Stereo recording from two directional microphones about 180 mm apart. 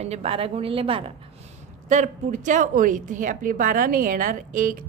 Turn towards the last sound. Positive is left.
turn(degrees=-45)  # may be behind; listen again after turning